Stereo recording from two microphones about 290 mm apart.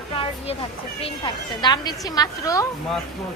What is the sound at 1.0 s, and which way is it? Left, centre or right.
A woman's voice, centre.